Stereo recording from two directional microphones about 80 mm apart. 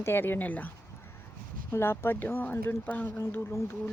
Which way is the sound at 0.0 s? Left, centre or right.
Left.